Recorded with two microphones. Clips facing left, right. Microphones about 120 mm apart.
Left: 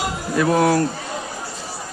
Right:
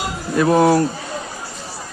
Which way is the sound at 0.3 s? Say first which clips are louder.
Right 3 dB; 25° right (ahead or behind).